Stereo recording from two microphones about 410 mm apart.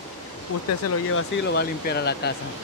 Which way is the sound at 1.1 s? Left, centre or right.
Left.